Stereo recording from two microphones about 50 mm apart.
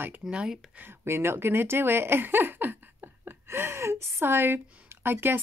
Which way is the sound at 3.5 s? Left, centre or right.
Right.